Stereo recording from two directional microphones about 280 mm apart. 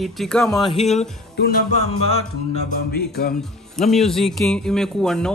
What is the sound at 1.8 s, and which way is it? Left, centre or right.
Music, left.